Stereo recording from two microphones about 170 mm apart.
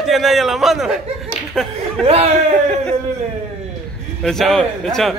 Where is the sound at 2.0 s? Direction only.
35° right (ahead or behind).